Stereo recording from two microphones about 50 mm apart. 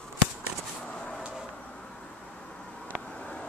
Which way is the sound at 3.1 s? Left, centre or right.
Centre.